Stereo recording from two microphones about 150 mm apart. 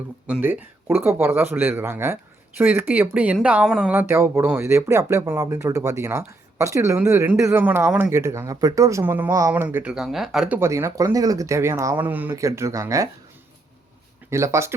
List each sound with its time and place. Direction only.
0.3 s speech: 10° right (ahead or behind)
4.0 s speech: 15° right (ahead or behind)
10.6 s speech: 20° right (ahead or behind)
14.3 s speech: 20° right (ahead or behind)